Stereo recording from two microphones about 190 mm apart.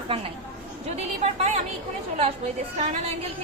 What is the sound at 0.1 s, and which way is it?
A woman's voice, 30° right (ahead or behind).